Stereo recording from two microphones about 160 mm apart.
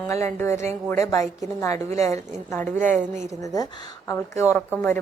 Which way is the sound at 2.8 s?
50° right (ahead or behind).